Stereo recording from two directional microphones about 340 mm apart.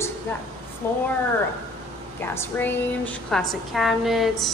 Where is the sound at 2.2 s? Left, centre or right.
Centre.